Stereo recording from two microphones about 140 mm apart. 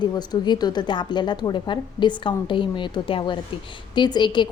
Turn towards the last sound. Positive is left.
turn(degrees=35)  # may be behind; listen again after turning